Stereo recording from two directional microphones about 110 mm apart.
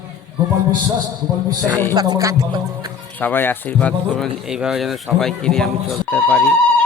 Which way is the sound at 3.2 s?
20° left (ahead or behind).